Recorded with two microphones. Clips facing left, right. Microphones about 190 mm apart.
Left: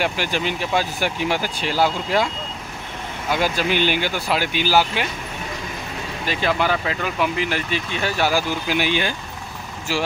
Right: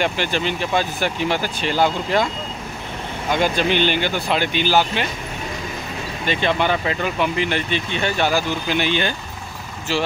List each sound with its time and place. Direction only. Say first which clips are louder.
0.0 s speech: right 1 dB; 10° left (ahead or behind)
6.2 s speech: right 1 dB; 5° left (ahead or behind)